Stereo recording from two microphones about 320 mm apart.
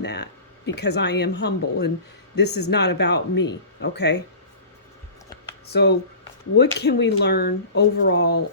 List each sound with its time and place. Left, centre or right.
0.0 s speech: left
2.3 s speech: left
2.6 s speech: left
5.6 s speech: left